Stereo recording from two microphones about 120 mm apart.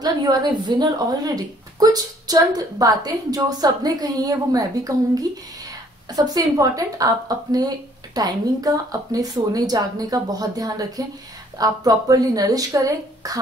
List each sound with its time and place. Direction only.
0.0 s a woman's voice: 35° right (ahead or behind)